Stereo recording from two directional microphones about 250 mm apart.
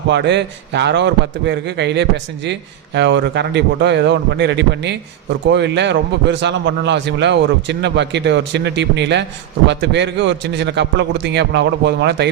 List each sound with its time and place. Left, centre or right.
0.1 s a man's voice: right